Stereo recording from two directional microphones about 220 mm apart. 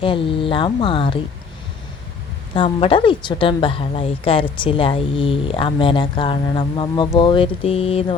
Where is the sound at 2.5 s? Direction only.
25° left (ahead or behind).